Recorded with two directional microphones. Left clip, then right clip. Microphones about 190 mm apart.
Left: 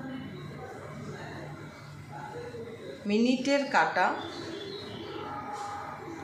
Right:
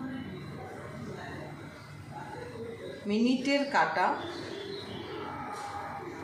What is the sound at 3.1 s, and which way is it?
A woman's voice, 30° left (ahead or behind).